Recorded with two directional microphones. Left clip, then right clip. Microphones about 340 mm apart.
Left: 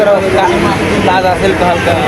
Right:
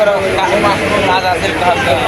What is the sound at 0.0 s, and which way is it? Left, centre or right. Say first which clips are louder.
Speech: left 3 dB; left.